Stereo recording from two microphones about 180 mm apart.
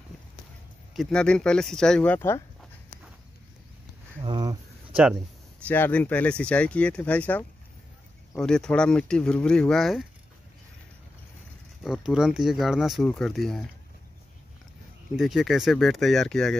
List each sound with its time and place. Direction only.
0.9 s speech: 5° left (ahead or behind)
4.2 s a sound: 25° right (ahead or behind)
5.7 s speech: 10° left (ahead or behind)
11.8 s speech: 5° right (ahead or behind)
15.1 s speech: centre (ahead or behind)